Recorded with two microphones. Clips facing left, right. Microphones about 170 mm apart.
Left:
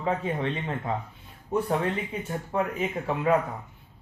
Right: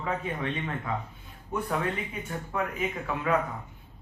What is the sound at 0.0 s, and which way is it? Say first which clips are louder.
A man's voice: left 4 dB; 30° left (ahead or behind).